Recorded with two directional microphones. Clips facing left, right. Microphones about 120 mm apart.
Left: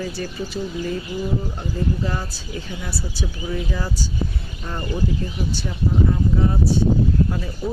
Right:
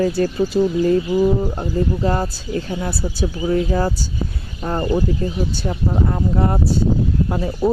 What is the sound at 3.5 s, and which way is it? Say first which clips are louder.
Speech: right 9 dB; 50° right (ahead or behind).